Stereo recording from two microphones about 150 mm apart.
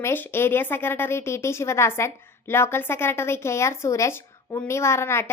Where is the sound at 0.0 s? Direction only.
15° left (ahead or behind).